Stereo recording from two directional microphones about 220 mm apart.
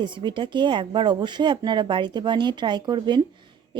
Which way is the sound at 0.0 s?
20° right (ahead or behind).